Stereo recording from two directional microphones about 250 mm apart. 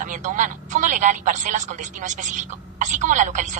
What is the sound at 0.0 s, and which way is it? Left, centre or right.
A woman's voice, right.